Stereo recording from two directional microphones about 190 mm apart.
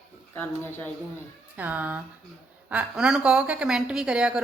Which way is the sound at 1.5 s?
10° right (ahead or behind).